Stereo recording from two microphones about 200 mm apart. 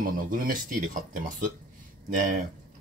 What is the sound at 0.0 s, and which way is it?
Speech, 45° right (ahead or behind).